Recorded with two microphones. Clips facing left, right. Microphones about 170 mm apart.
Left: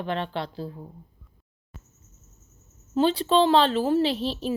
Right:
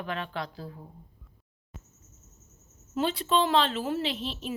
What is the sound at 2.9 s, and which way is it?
A woman's voice, 30° left (ahead or behind).